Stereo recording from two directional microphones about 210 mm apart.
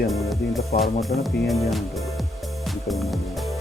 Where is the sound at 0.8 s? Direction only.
Centre (ahead or behind).